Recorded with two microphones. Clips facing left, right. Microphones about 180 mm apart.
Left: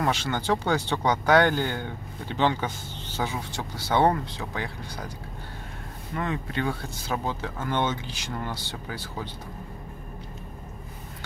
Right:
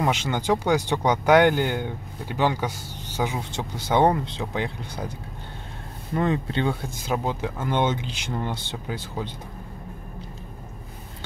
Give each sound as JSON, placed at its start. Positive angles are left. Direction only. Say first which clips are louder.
{"t": 0.0, "sound": "speech", "louder": "right 2 dB", "side_deg": -15}
{"t": 6.1, "sound": "speech", "louder": "right 6 dB", "side_deg": -30}